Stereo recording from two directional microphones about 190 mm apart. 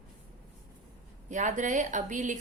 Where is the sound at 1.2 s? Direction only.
40° right (ahead or behind).